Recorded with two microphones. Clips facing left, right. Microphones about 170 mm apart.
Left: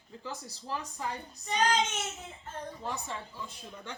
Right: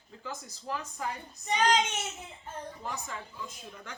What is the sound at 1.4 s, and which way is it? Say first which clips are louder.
Child singing: right 2 dB; 15° right (ahead or behind).